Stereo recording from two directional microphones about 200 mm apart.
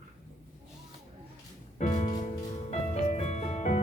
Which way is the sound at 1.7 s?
35° left (ahead or behind).